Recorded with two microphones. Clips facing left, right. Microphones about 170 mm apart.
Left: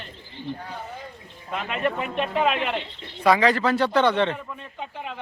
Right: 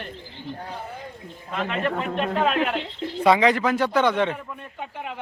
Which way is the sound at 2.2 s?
5° left (ahead or behind).